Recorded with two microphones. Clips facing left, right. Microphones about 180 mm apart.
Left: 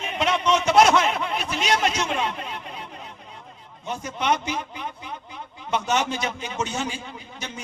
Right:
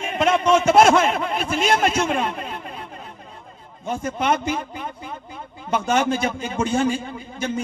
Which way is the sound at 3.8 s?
50° right (ahead or behind).